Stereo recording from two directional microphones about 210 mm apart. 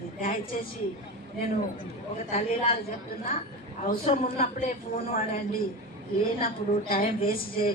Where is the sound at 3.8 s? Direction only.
40° left (ahead or behind).